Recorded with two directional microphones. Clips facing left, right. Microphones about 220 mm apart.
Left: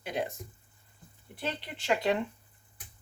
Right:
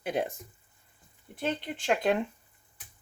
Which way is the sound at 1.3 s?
50° right (ahead or behind).